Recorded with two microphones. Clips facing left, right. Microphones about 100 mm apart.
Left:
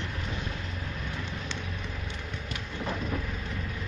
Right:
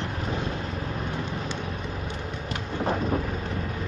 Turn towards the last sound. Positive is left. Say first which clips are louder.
# right 7 dB
turn(degrees=-45)  # may be behind; listen again after turning